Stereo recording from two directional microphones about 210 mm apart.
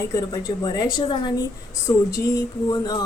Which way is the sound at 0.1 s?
15° left (ahead or behind).